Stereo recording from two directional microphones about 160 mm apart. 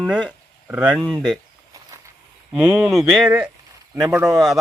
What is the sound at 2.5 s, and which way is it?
Speech, 5° right (ahead or behind).